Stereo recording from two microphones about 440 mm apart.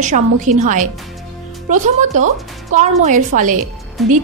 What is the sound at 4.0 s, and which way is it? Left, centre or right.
Speech, centre.